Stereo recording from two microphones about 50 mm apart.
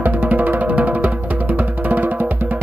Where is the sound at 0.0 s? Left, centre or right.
Right.